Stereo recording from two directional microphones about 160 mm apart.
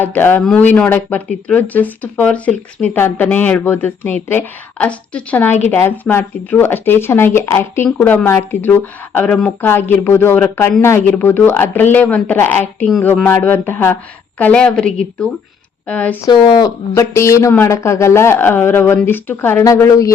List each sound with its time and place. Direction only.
0.0 s speech: 10° left (ahead or behind)
16.2 s speech: 25° left (ahead or behind)